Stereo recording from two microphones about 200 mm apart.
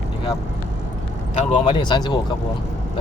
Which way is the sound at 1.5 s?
25° left (ahead or behind).